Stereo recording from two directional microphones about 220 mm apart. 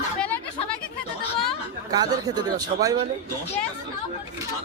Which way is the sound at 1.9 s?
20° right (ahead or behind).